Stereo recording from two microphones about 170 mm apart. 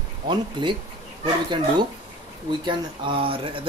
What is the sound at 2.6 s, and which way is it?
Speech, 30° right (ahead or behind).